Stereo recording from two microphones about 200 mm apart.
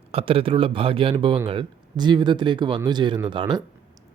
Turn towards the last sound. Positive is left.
turn(degrees=-25)  # may be behind; listen again after turning